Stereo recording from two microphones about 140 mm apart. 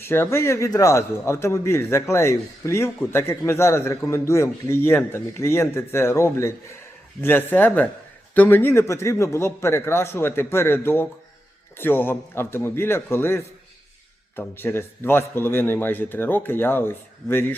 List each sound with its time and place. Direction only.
0.0 s a man's voice: 15° left (ahead or behind)